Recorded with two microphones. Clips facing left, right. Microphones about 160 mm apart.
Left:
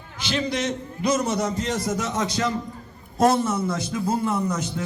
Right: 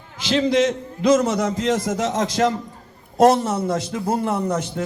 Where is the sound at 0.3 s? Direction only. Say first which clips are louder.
Right 7 dB; 90° right.